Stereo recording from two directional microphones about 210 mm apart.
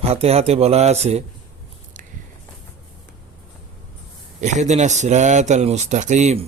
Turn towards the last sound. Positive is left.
turn(degrees=-35)  # may be behind; listen again after turning